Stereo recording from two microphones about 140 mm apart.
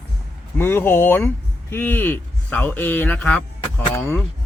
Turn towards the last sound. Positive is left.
turn(degrees=15)  # may be behind; listen again after turning